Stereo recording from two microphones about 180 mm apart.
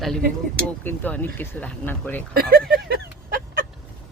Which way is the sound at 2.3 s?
55° right (ahead or behind).